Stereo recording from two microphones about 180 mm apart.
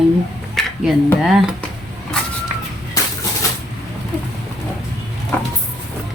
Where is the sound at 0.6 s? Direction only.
Centre (ahead or behind).